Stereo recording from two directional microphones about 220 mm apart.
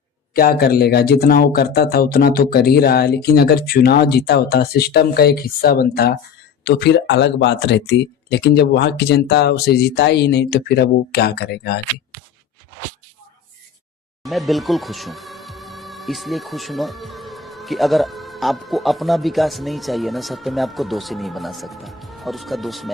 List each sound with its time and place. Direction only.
0.3 s speech: 45° left (ahead or behind)
14.3 s speech: centre (ahead or behind)